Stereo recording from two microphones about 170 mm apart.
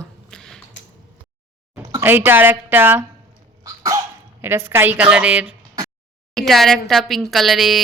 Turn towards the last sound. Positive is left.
turn(degrees=0)  # may be behind; listen again after turning